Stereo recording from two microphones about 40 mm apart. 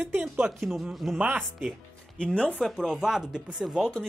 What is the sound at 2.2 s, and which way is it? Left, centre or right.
Speech, left.